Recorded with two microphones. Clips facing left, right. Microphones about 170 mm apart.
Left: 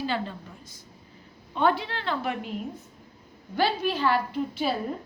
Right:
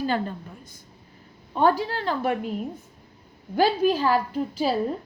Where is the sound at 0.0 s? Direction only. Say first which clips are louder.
Right 4 dB; 45° right (ahead or behind).